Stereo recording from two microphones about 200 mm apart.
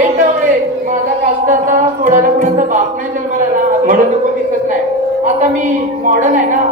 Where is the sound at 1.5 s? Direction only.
40° right (ahead or behind).